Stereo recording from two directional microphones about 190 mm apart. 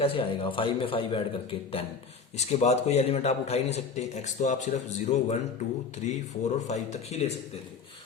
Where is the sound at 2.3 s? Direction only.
35° left (ahead or behind).